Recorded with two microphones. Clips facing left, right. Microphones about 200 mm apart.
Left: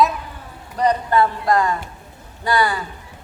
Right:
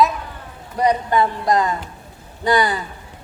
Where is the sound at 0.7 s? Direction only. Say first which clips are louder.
Even; 15° right (ahead or behind).